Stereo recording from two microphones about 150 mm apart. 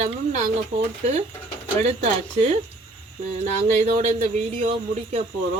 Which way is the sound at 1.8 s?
45° right (ahead or behind).